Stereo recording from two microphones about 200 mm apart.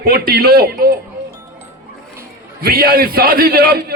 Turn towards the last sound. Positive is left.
turn(degrees=-50)  # may be behind; listen again after turning